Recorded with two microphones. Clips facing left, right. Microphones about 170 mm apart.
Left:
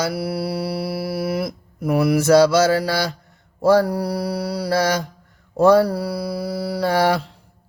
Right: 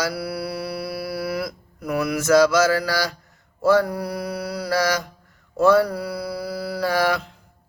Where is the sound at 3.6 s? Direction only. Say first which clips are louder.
Left 3 dB; 35° left (ahead or behind).